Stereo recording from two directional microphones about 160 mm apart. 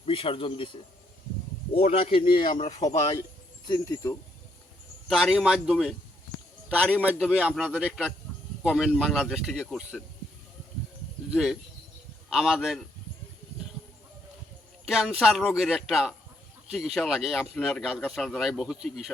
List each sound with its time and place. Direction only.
0.0 s speech: 35° left (ahead or behind)
1.7 s speech: 40° left (ahead or behind)
2.6 s speech: 45° left (ahead or behind)
3.7 s speech: 20° left (ahead or behind)
5.0 s a man's voice: centre (ahead or behind)
11.3 s speech: 5° right (ahead or behind)
14.8 s speech: 5° right (ahead or behind)